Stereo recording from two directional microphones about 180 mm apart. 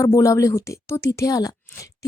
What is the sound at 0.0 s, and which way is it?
A woman's voice, 15° left (ahead or behind).